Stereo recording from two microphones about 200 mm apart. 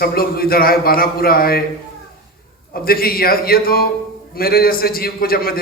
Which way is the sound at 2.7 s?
50° left (ahead or behind).